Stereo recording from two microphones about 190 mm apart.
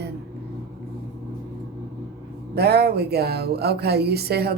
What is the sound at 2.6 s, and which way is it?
Speech, 55° right (ahead or behind).